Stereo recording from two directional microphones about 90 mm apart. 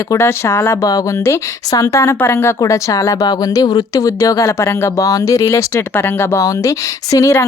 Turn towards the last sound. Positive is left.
turn(degrees=35)  # may be behind; listen again after turning